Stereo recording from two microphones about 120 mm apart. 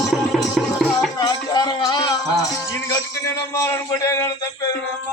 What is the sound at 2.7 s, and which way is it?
A man's voice, 25° left (ahead or behind).